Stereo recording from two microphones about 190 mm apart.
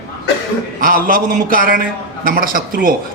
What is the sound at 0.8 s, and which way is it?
A man's voice, 50° right (ahead or behind).